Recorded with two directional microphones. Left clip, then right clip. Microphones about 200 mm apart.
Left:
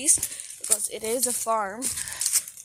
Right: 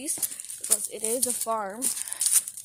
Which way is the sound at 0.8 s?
20° left (ahead or behind).